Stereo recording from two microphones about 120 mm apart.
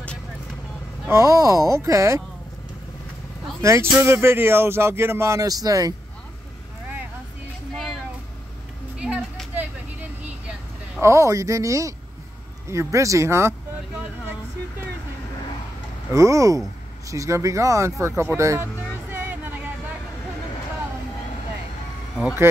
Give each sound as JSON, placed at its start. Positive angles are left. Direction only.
{"t": 1.0, "sound": "speech", "side_deg": -25}
{"t": 3.6, "sound": "speech", "side_deg": -25}
{"t": 8.9, "sound": "a sound", "side_deg": -10}
{"t": 9.6, "sound": "vehicle", "side_deg": -10}
{"t": 11.0, "sound": "speech", "side_deg": -25}
{"t": 16.1, "sound": "speech", "side_deg": -25}
{"t": 18.0, "sound": "music", "side_deg": -20}